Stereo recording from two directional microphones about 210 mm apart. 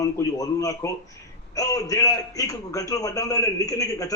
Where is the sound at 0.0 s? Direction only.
15° left (ahead or behind).